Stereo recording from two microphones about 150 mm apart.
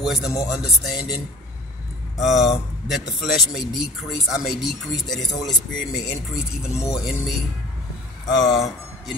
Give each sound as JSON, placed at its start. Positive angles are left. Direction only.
{"t": 0.0, "sound": "speech", "side_deg": 0}
{"t": 8.5, "sound": "speech", "side_deg": 0}